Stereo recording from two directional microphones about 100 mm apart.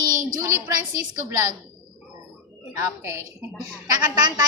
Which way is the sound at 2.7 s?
30° right (ahead or behind).